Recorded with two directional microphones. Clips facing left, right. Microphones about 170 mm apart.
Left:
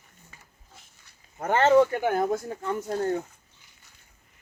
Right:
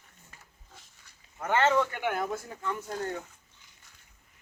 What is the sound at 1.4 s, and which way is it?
Speech, 40° left (ahead or behind).